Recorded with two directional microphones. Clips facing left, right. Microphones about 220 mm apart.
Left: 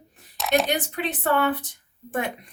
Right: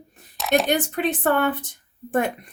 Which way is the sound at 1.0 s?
50° right (ahead or behind).